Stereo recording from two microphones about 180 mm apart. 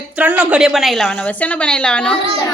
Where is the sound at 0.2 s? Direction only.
10° right (ahead or behind).